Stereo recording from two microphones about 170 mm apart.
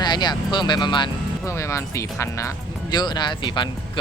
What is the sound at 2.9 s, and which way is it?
Speech, 25° left (ahead or behind).